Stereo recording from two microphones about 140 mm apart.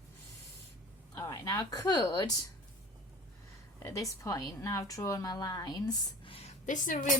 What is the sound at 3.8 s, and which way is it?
A woman's voice, 25° left (ahead or behind).